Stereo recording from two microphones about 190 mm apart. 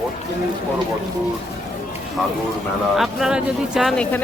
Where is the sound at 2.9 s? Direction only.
Centre (ahead or behind).